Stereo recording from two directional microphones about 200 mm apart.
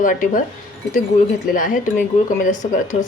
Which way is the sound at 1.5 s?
40° left (ahead or behind).